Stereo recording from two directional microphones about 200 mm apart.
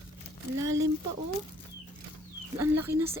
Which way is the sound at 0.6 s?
15° right (ahead or behind).